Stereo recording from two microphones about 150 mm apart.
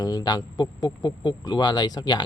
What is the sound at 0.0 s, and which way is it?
Speech, 25° left (ahead or behind).